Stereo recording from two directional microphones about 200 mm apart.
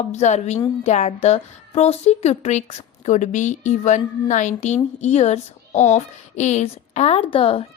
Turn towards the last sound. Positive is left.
turn(degrees=30)  # may be behind; listen again after turning